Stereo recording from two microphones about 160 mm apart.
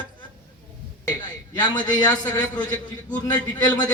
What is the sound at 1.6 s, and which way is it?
A man's voice, 25° left (ahead or behind).